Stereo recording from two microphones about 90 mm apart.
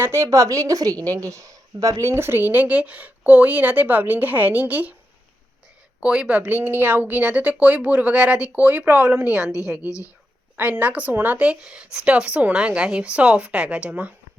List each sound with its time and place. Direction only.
0.0 s a woman's voice: 30° right (ahead or behind)
6.0 s speech: 10° right (ahead or behind)
9.8 s speech: 35° left (ahead or behind)
10.6 s speech: 15° right (ahead or behind)